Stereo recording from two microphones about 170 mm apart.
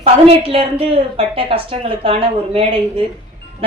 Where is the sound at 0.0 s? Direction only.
35° right (ahead or behind).